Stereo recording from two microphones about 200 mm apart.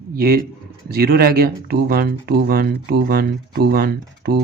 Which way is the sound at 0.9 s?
50° right (ahead or behind).